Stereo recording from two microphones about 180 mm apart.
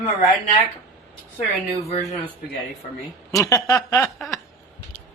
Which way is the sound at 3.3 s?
20° left (ahead or behind).